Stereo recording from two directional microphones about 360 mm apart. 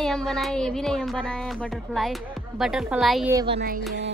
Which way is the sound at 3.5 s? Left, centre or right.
Right.